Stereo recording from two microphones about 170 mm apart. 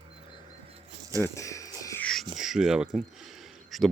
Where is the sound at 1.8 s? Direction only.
20° left (ahead or behind).